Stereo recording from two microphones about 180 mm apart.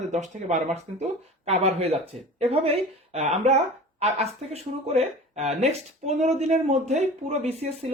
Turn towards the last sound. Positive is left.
turn(degrees=-35)  # may be behind; listen again after turning